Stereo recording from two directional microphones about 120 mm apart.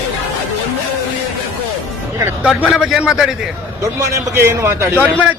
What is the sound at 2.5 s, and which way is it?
Speech, centre (ahead or behind).